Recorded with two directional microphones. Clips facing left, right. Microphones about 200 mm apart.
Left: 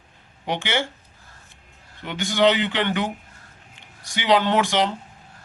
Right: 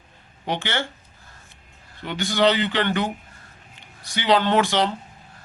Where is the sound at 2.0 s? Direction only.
15° left (ahead or behind).